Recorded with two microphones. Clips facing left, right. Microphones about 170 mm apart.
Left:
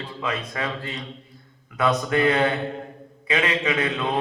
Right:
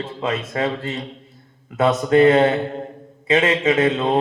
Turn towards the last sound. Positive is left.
turn(degrees=-25)  # may be behind; listen again after turning